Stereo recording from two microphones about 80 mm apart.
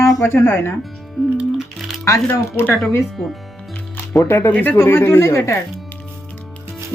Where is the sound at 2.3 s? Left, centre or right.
Left.